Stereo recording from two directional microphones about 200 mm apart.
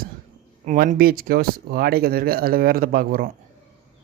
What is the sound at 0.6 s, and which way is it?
Speech, 40° right (ahead or behind).